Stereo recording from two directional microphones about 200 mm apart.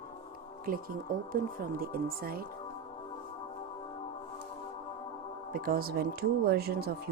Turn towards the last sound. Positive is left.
turn(degrees=-50)  # may be behind; listen again after turning